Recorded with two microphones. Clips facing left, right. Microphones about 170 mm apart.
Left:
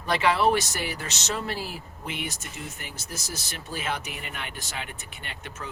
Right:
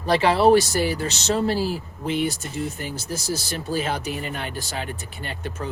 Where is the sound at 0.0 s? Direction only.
30° right (ahead or behind).